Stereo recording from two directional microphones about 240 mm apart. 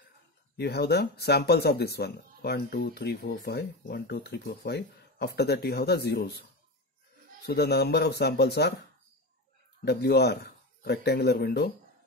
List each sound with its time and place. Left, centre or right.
0.6 s speech: left
7.4 s speech: left
9.8 s speech: left